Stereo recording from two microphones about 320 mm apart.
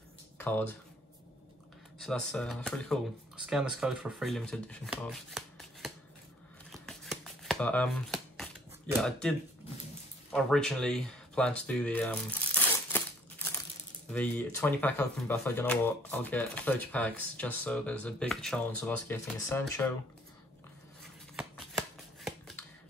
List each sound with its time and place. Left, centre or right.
0.4 s speech: centre
2.0 s speech: centre
6.7 s shuffling cards: centre
10.3 s a sound: centre
14.1 s speech: centre
21.4 s shuffling cards: centre